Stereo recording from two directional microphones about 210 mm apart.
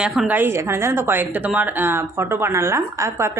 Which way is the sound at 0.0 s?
5° right (ahead or behind).